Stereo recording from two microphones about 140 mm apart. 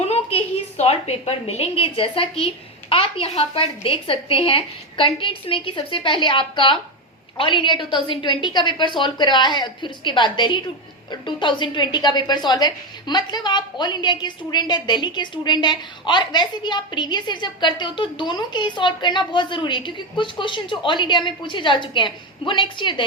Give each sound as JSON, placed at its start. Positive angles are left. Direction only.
{"t": 0.1, "sound": "a woman's voice", "side_deg": 45}